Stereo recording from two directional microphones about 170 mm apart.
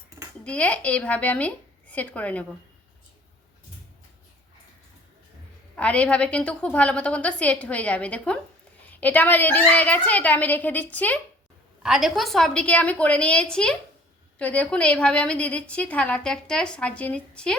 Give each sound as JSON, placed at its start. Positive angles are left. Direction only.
{"t": 0.4, "sound": "a woman's voice", "side_deg": 5}
{"t": 5.7, "sound": "a woman's voice", "side_deg": 5}
{"t": 11.8, "sound": "a woman's voice", "side_deg": 0}